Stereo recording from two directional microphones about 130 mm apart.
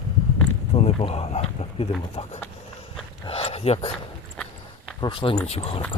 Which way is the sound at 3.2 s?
45° left (ahead or behind).